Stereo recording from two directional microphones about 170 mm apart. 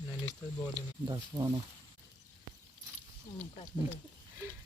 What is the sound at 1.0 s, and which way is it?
Speech, 25° right (ahead or behind).